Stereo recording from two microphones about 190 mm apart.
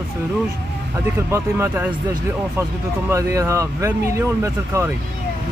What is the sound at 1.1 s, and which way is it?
Speech, 15° right (ahead or behind).